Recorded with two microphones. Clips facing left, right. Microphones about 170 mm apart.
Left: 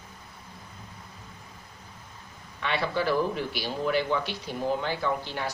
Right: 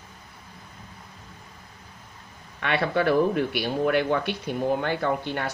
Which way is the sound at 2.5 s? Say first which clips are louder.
Right 4 dB; 60° right (ahead or behind).